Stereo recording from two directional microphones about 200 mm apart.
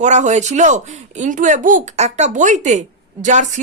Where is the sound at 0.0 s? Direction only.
35° right (ahead or behind).